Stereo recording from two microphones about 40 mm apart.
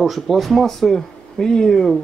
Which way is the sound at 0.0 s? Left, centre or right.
Centre.